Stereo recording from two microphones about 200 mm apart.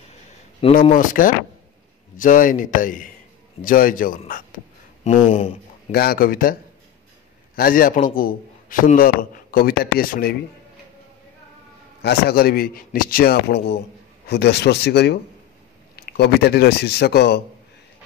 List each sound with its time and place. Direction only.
0.6 s speech: 30° left (ahead or behind)
0.9 s a man's voice: 40° left (ahead or behind)
5.0 s speech: 30° left (ahead or behind)
5.9 s a man's voice: 50° left (ahead or behind)
12.0 s a man's voice: 55° left (ahead or behind)